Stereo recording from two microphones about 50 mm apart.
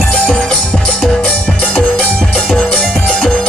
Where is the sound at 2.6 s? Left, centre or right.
Centre.